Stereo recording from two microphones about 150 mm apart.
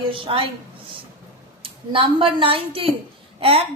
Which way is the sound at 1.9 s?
35° right (ahead or behind).